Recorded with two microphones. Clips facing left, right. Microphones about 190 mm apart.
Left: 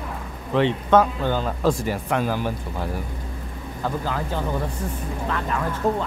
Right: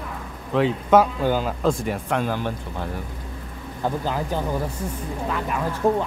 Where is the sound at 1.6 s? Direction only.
Centre (ahead or behind).